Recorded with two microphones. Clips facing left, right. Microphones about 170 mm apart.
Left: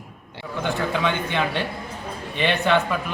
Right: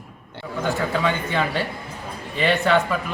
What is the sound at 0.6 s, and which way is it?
Speech, centre (ahead or behind).